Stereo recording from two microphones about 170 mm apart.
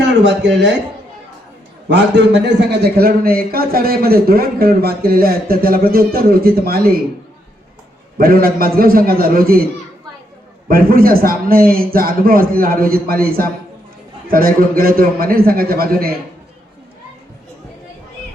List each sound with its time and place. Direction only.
0.0 s speech: 90° right
1.9 s a man's voice: 90° right; by 7.0 s 65° right (ahead or behind)
8.2 s a man's voice: 60° right (ahead or behind)
10.7 s a man's voice: 60° right (ahead or behind)